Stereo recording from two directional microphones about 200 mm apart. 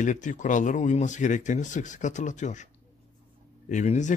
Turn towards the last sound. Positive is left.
turn(degrees=40)  # may be behind; listen again after turning